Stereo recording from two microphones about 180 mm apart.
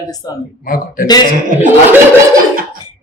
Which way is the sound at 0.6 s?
50° left (ahead or behind).